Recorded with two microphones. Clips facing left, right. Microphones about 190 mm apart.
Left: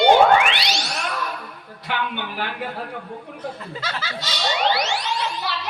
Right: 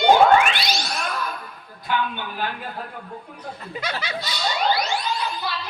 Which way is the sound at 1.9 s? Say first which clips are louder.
Right 1 dB; 70° left (ahead or behind).